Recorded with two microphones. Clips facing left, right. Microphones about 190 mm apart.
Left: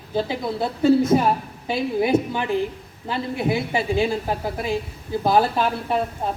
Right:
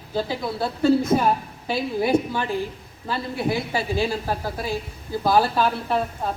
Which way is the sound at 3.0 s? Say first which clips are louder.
Left 2 dB; 20° left (ahead or behind).